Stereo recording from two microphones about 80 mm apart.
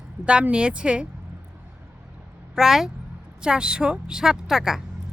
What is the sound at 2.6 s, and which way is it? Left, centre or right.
A woman's voice, centre.